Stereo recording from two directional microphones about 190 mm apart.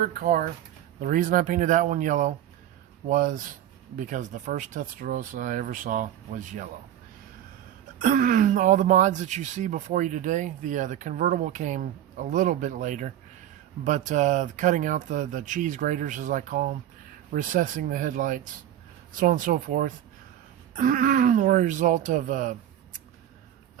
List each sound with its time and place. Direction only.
0.0 s speech: 50° right (ahead or behind)
7.9 s speech: 45° right (ahead or behind)